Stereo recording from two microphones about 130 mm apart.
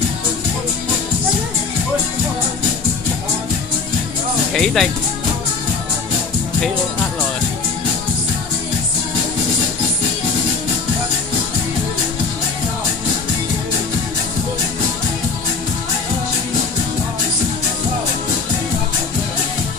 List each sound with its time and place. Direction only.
4.6 s speech: 5° left (ahead or behind)